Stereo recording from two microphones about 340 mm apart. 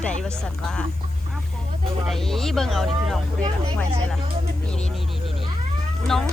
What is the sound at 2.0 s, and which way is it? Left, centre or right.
Speech, centre.